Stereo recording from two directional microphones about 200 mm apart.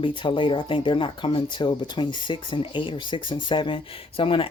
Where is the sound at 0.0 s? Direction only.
25° left (ahead or behind).